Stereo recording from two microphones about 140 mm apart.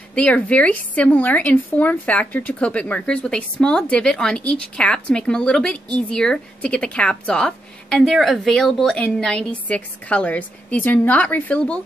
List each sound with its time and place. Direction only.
0.1 s a woman's voice: 10° left (ahead or behind)